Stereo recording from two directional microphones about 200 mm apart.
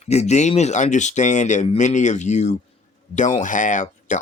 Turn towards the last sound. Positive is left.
turn(degrees=40)  # may be behind; listen again after turning